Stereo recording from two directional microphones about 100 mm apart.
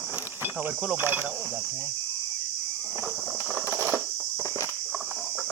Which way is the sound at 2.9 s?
15° right (ahead or behind).